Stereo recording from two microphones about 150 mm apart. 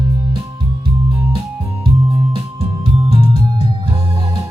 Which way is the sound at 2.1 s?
35° right (ahead or behind).